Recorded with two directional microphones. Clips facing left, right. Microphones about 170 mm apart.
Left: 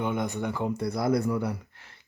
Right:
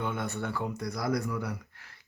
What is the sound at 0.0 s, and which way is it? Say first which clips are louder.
Speech: left 4 dB; 15° left (ahead or behind).